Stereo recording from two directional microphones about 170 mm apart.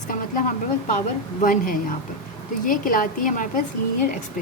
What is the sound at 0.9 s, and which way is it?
A woman's voice, 50° left (ahead or behind).